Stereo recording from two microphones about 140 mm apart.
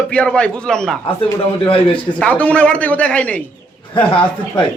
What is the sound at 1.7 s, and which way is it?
Speech, 40° left (ahead or behind).